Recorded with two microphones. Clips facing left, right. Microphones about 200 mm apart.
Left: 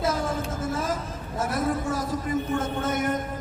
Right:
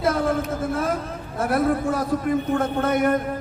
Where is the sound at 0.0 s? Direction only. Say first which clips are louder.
Right 5 dB; 60° right (ahead or behind).